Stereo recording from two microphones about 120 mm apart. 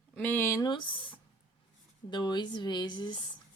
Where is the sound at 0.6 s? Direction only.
40° left (ahead or behind).